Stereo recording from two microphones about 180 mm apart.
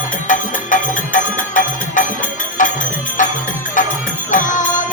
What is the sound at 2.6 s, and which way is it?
Music, 45° left (ahead or behind).